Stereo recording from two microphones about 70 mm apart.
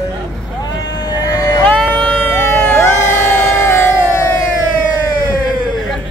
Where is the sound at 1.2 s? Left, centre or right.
Left.